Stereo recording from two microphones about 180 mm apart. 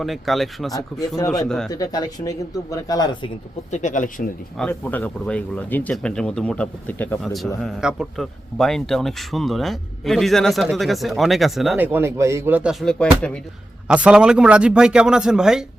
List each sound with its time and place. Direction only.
0.0 s speech: centre (ahead or behind)
1.7 s speech: 20° left (ahead or behind)
3.7 s speech: 40° left (ahead or behind)
4.5 s speech: 10° left (ahead or behind)
11.9 s a man's voice: 15° right (ahead or behind)
12.8 s speech: 5° left (ahead or behind)